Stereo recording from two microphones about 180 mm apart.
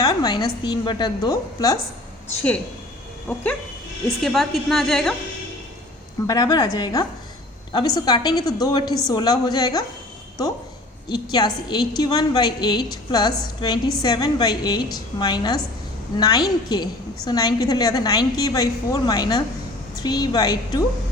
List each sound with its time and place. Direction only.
0.0 s a woman's voice: 20° left (ahead or behind)
4.2 s a woman's voice: centre (ahead or behind)
6.2 s a woman's voice: 20° left (ahead or behind)
11.1 s a woman's voice: 20° left (ahead or behind)